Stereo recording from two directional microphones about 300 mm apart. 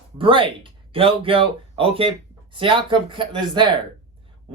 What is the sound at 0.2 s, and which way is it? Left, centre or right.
A woman's voice, centre.